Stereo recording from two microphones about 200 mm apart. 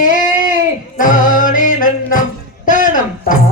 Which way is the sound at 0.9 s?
40° left (ahead or behind).